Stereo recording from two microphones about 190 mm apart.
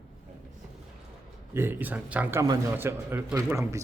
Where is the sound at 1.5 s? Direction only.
10° right (ahead or behind).